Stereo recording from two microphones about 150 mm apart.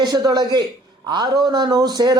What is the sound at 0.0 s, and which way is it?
A man's voice, 25° right (ahead or behind).